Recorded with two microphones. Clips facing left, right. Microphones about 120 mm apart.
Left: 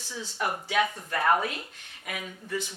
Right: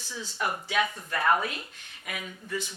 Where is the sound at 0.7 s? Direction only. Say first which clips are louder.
Left 3 dB; 45° left (ahead or behind).